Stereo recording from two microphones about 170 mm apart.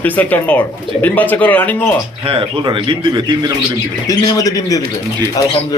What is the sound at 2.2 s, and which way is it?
A man's voice, 30° right (ahead or behind).